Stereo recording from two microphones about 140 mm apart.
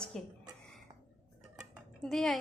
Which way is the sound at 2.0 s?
Centre (ahead or behind).